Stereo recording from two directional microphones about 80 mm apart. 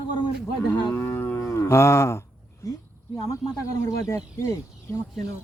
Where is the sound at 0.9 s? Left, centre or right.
Left.